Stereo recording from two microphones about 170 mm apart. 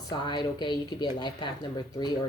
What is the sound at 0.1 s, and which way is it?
Speech, 25° left (ahead or behind).